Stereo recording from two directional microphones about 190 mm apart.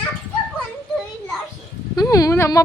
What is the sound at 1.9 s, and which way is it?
Speech, 20° left (ahead or behind).